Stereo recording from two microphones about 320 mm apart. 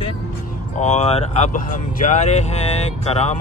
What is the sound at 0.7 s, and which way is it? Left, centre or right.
Speech, left.